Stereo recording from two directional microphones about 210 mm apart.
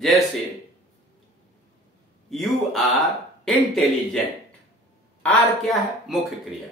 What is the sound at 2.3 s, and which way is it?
Speech, centre (ahead or behind).